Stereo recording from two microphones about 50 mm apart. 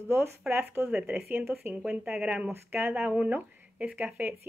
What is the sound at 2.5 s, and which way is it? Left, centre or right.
Speech, right.